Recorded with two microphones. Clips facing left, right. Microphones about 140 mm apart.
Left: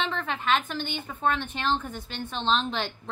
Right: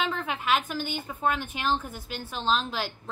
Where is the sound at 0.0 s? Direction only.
10° right (ahead or behind).